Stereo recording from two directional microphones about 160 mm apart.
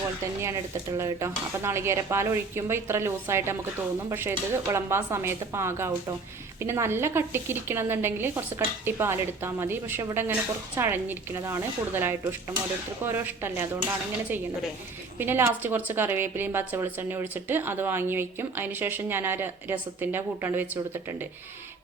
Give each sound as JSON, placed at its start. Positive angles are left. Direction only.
{"t": 0.4, "sound": "a woman's voice", "side_deg": -20}
{"t": 15.2, "sound": "a woman's voice", "side_deg": -15}